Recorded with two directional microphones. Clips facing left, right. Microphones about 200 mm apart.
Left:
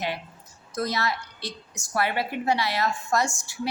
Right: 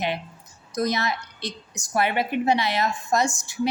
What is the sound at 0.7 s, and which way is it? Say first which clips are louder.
A woman's voice: right 3 dB; 20° right (ahead or behind).